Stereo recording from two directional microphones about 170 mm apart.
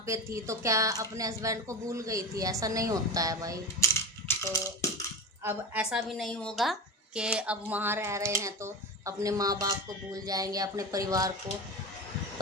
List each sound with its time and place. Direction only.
0.0 s a woman's voice: 15° right (ahead or behind)
4.3 s music: 20° left (ahead or behind)
5.4 s a woman's voice: 10° right (ahead or behind)